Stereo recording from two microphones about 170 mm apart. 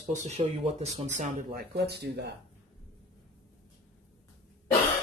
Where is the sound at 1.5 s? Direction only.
65° right (ahead or behind).